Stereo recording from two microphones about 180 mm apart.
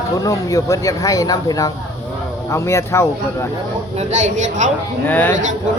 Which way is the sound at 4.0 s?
40° right (ahead or behind).